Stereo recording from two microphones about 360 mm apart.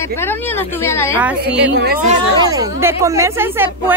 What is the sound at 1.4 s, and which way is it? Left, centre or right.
Speech, right.